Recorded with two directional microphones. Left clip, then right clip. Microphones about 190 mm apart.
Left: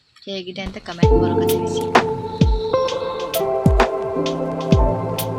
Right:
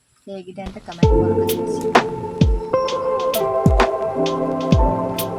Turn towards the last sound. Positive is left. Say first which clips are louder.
# right 1 dB
turn(degrees=0)  # may be behind; listen again after turning